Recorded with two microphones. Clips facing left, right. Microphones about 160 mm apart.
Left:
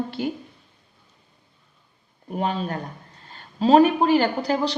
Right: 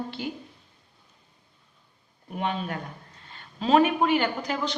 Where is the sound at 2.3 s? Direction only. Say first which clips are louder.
Left 4 dB; 35° left (ahead or behind).